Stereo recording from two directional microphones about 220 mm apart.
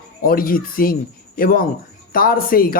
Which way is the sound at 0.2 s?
40° left (ahead or behind).